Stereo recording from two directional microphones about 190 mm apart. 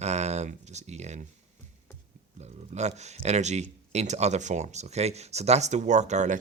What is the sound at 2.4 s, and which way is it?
Speech, 35° right (ahead or behind).